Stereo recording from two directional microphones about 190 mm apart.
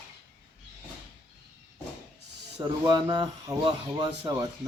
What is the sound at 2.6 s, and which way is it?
Speech, 25° right (ahead or behind).